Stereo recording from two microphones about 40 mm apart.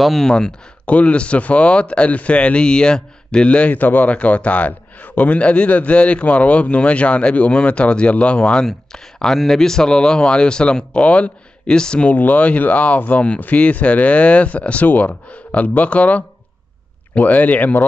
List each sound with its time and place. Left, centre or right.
0.0 s speech: centre
0.8 s speech: left
3.7 s speech: left
8.6 s speech: centre
12.1 s speech: left